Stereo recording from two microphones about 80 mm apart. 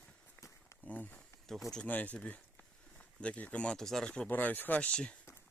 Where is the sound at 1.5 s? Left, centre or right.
Centre.